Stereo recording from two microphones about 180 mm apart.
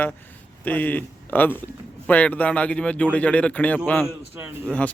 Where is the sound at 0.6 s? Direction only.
10° left (ahead or behind).